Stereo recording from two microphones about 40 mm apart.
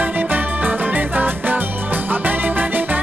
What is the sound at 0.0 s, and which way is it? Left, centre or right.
Music, right.